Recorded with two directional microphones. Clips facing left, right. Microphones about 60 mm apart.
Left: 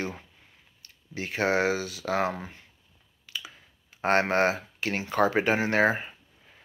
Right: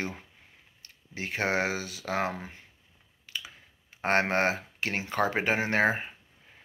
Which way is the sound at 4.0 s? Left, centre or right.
Right.